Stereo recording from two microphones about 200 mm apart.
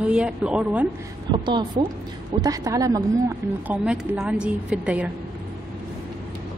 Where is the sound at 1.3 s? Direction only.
20° right (ahead or behind).